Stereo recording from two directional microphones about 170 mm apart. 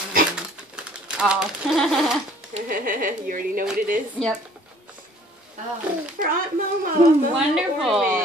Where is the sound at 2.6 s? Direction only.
55° right (ahead or behind).